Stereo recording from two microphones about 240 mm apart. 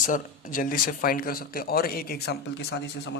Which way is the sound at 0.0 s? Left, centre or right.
Left.